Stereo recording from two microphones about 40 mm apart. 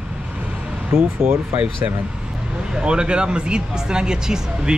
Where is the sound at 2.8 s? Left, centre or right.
Right.